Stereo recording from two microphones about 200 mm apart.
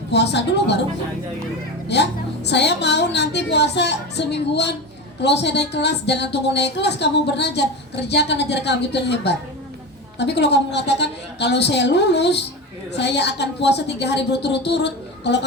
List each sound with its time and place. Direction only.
0.1 s a woman's voice: 60° left (ahead or behind)
2.5 s a woman's voice: 60° left (ahead or behind)